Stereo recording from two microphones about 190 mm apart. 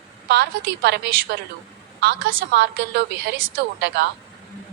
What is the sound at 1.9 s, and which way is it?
A woman's voice, 75° right (ahead or behind).